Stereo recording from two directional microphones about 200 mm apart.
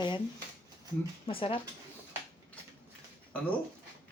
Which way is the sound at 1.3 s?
25° left (ahead or behind).